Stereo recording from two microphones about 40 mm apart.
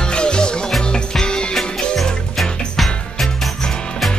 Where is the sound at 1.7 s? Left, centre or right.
Centre.